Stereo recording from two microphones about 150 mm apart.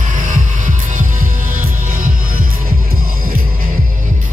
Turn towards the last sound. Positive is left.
turn(degrees=-70)  # may be behind; listen again after turning